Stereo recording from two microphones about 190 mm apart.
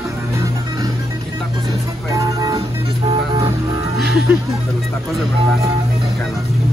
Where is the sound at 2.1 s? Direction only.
20° right (ahead or behind).